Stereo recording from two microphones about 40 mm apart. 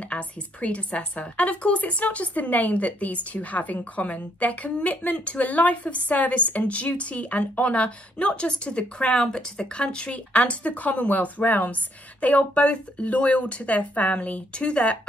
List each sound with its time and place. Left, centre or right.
0.1 s a woman's voice: left